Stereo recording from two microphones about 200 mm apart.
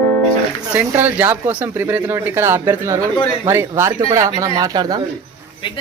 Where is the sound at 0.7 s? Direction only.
10° right (ahead or behind).